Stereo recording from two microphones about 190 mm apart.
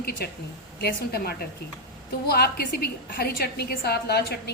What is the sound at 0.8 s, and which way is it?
A woman's voice, 55° left (ahead or behind).